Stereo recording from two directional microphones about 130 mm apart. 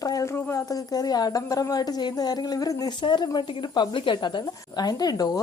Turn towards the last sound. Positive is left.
turn(degrees=30)  # may be behind; listen again after turning